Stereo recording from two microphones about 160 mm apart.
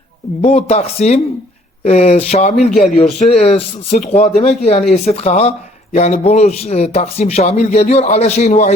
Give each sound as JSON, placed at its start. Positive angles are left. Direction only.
{"t": 0.4, "sound": "a man's voice", "side_deg": 40}